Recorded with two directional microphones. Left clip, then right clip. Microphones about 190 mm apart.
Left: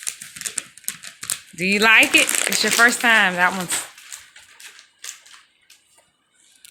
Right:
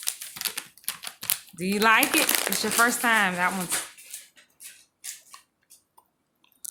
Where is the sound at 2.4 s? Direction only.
10° left (ahead or behind).